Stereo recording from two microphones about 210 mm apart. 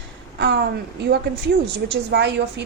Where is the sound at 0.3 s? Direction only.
55° right (ahead or behind).